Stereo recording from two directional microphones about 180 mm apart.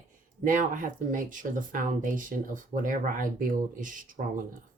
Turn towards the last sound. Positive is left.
turn(degrees=-50)  # may be behind; listen again after turning